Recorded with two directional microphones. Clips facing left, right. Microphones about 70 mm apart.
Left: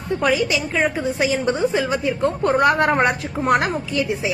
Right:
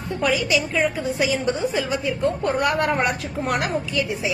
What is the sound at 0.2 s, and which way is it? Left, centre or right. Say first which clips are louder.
A woman's voice: even; left.